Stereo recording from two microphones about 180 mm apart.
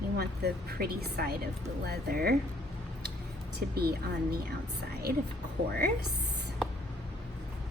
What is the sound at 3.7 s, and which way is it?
Speech, 60° right (ahead or behind).